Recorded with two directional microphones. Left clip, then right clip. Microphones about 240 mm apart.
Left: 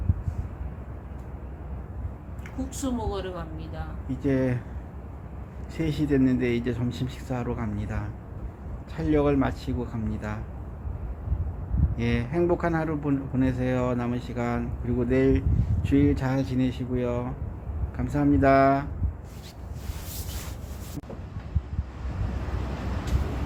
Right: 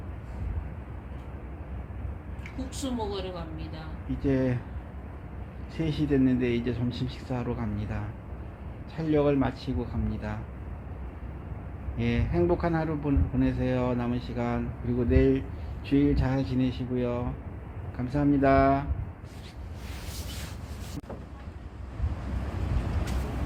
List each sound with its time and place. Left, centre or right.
2.6 s speech: centre
4.2 s speech: centre
5.7 s a man's voice: centre
11.9 s speech: centre